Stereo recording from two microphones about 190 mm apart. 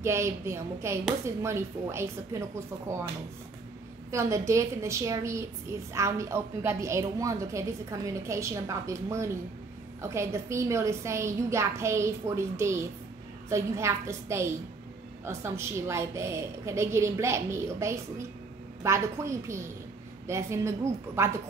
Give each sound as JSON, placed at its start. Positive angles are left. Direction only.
{"t": 0.0, "sound": "a woman's voice", "side_deg": -15}
{"t": 4.1, "sound": "a woman's voice", "side_deg": -15}